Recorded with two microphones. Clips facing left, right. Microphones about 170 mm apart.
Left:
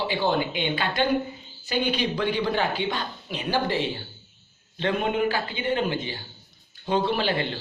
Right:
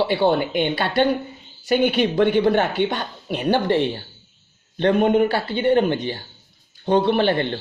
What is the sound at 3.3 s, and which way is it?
Speech, 60° right (ahead or behind).